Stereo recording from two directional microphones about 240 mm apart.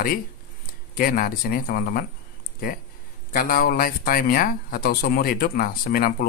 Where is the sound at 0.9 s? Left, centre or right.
Left.